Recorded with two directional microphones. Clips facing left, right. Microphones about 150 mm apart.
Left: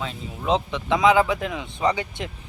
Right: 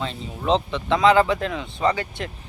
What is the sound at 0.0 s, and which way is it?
Speech, 5° left (ahead or behind).